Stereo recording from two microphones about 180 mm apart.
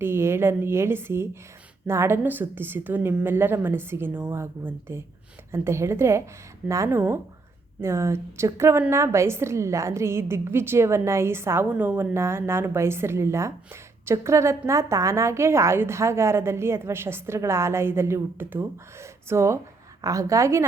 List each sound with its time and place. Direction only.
0.0 s a woman's voice: 15° right (ahead or behind)